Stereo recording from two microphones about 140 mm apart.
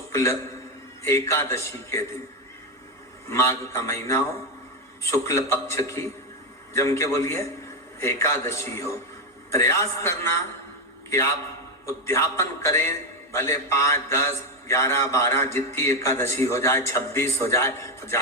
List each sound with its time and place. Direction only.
0.1 s a man's voice: 20° left (ahead or behind)
3.2 s a man's voice: 20° left (ahead or behind)
11.9 s a man's voice: 20° left (ahead or behind)